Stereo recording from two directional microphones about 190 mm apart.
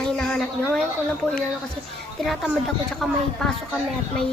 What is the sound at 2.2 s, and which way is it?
Speech, centre (ahead or behind).